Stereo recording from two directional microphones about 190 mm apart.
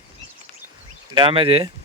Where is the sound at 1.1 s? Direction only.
25° right (ahead or behind).